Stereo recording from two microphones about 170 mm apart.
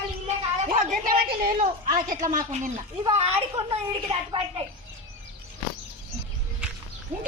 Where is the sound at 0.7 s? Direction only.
50° right (ahead or behind).